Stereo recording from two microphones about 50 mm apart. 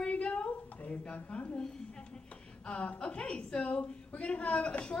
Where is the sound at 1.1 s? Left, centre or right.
Left.